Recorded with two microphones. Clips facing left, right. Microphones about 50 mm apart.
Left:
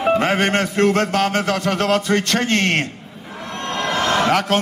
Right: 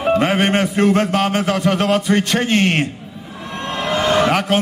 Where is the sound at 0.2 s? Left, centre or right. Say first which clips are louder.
Right 2 dB; centre.